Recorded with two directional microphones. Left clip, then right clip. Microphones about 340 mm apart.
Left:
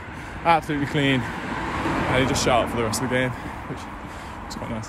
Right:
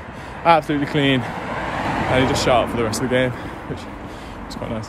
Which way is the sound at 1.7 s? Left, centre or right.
Right.